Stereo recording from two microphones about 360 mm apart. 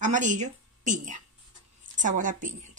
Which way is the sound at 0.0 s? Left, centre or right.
Right.